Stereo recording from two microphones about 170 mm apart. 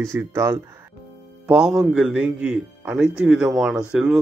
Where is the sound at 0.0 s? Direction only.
15° right (ahead or behind).